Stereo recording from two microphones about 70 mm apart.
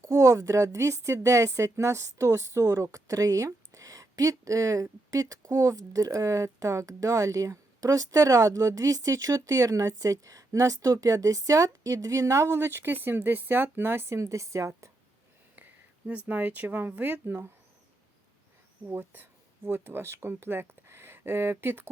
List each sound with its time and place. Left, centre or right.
0.0 s a woman's voice: right
15.5 s speech: right
18.9 s speech: right